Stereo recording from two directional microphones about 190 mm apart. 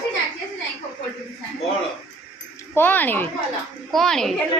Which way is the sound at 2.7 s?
10° left (ahead or behind).